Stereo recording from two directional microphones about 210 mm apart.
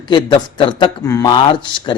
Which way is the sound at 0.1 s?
20° left (ahead or behind).